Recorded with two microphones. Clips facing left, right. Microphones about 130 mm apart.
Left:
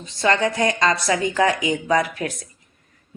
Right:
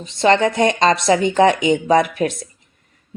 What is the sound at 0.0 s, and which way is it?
A woman's voice, 25° right (ahead or behind).